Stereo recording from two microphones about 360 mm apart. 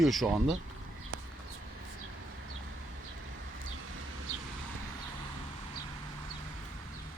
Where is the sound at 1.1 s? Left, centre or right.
Right.